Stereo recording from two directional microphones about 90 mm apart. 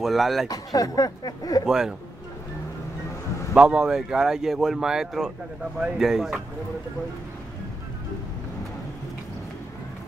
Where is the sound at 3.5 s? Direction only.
10° right (ahead or behind).